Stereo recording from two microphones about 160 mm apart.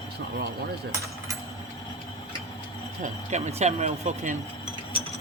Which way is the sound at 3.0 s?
45° right (ahead or behind).